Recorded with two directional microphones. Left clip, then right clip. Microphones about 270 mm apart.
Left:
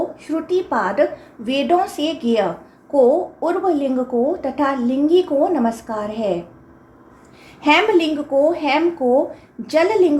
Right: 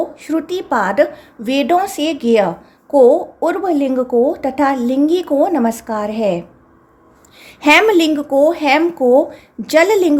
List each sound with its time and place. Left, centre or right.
0.2 s a woman's voice: right
7.4 s a woman's voice: right